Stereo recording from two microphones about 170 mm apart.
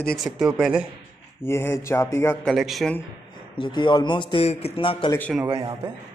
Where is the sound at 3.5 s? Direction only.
30° left (ahead or behind).